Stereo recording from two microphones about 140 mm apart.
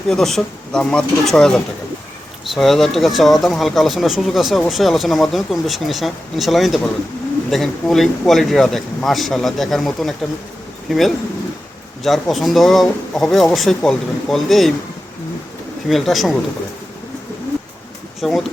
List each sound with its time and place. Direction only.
0.1 s speech: centre (ahead or behind)
15.9 s speech: centre (ahead or behind)
18.2 s speech: centre (ahead or behind)